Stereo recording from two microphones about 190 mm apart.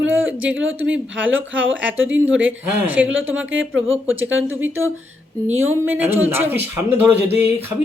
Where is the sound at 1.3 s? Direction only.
90° right.